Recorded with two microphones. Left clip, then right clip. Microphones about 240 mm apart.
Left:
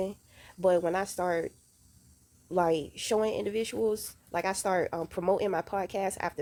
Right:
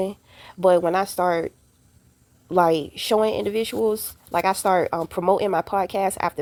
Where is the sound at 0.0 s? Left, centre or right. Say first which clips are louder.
Right 7 dB; centre.